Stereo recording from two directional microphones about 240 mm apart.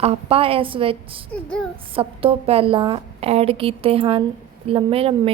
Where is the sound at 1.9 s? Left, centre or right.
Right.